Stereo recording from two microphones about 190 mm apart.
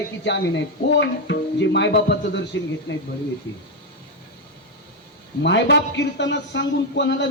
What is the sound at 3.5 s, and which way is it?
Speech, 75° left (ahead or behind).